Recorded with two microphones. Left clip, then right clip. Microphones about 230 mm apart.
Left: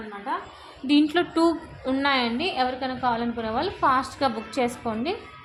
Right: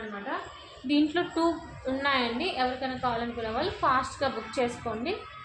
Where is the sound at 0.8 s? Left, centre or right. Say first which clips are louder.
Left 5 dB; left.